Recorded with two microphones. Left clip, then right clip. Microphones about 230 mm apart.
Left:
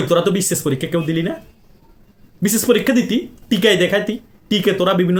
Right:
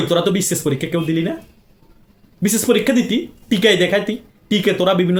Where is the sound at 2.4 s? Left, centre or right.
Centre.